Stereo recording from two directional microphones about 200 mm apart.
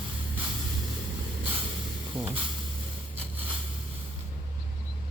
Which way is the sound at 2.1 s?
25° right (ahead or behind).